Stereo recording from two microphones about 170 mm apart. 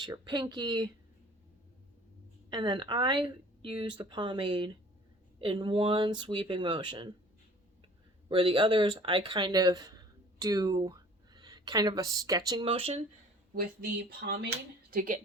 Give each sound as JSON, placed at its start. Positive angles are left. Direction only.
{"t": 0.0, "sound": "speech", "side_deg": -25}
{"t": 2.5, "sound": "speech", "side_deg": -25}
{"t": 8.3, "sound": "speech", "side_deg": -35}
{"t": 14.2, "sound": "speech", "side_deg": -85}
{"t": 14.8, "sound": "a woman's voice", "side_deg": -55}